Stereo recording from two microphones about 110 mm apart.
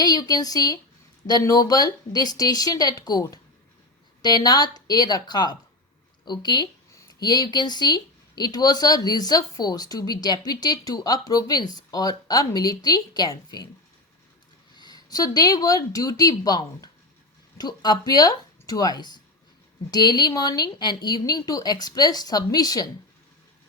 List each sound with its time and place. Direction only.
0.0 s speech: 35° left (ahead or behind)
14.8 s speech: 40° left (ahead or behind)